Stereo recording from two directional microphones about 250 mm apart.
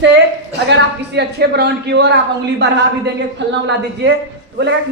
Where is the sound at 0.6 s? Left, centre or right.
Right.